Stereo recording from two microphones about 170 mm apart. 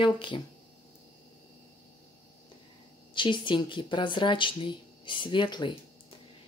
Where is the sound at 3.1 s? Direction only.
30° left (ahead or behind).